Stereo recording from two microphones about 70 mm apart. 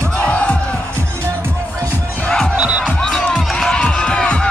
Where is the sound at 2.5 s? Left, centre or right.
Centre.